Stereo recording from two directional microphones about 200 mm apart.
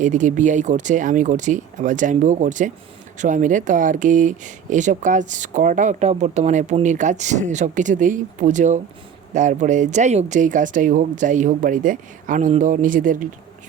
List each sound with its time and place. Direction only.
0.0 s speech: 40° right (ahead or behind)